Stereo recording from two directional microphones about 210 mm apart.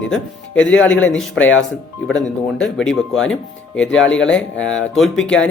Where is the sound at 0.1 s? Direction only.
5° left (ahead or behind).